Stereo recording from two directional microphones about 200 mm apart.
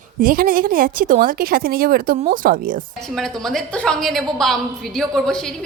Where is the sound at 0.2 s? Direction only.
45° right (ahead or behind).